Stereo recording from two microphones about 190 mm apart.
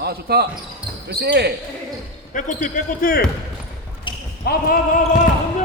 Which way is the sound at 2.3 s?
45° left (ahead or behind).